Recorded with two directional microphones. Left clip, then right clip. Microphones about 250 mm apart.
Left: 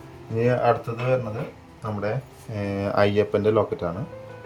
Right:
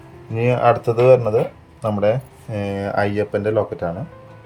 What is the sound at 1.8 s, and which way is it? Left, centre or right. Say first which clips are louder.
Speech: right 10 dB; centre.